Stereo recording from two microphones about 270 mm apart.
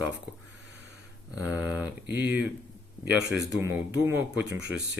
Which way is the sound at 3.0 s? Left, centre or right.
Right.